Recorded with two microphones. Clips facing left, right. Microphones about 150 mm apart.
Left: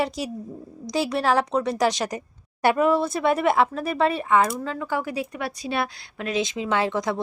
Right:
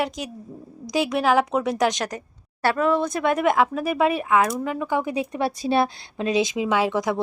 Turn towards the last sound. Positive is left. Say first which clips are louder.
# right 2 dB
turn(degrees=-10)  # may be behind; listen again after turning